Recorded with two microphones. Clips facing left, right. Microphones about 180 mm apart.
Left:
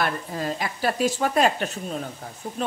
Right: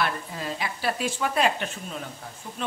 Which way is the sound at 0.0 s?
45° left (ahead or behind).